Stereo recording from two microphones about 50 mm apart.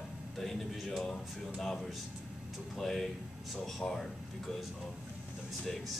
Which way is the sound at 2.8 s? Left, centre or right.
Centre.